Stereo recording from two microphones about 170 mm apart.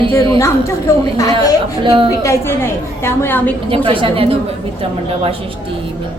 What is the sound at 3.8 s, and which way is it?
Speech, 30° right (ahead or behind).